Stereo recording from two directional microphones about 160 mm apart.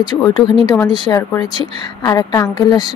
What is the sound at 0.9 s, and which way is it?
A woman's voice, 25° left (ahead or behind).